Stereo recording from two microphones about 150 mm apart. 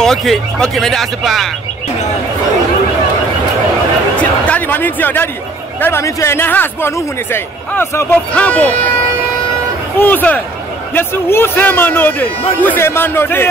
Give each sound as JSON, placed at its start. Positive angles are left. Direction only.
{"t": 0.0, "sound": "speech", "side_deg": 0}
{"t": 4.2, "sound": "a sound", "side_deg": 10}
{"t": 5.8, "sound": "speech", "side_deg": 15}
{"t": 9.9, "sound": "speech", "side_deg": 10}